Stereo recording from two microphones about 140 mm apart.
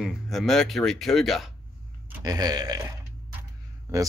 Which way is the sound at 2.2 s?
25° right (ahead or behind).